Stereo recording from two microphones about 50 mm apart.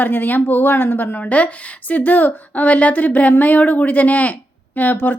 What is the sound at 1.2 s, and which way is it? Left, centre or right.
A woman's voice, left.